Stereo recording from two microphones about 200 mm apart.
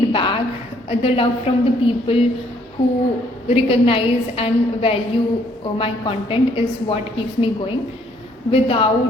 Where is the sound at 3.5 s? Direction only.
30° left (ahead or behind).